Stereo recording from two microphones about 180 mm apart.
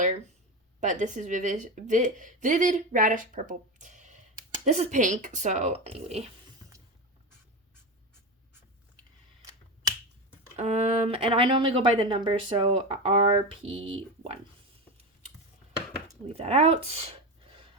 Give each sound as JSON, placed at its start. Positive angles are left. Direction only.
{"t": 0.8, "sound": "a woman's voice", "side_deg": -40}
{"t": 10.6, "sound": "speech", "side_deg": -40}
{"t": 16.3, "sound": "speech", "side_deg": -35}